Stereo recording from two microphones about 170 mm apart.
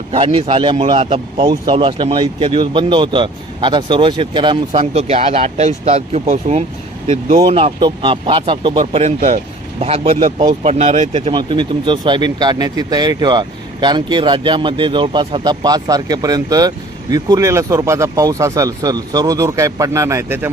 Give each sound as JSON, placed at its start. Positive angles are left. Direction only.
{"t": 0.1, "sound": "a man's voice", "side_deg": -35}